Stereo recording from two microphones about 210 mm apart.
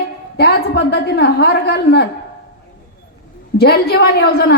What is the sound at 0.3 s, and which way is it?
A woman's voice, 50° left (ahead or behind).